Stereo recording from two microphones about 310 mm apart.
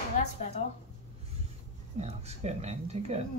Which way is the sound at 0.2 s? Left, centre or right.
Left.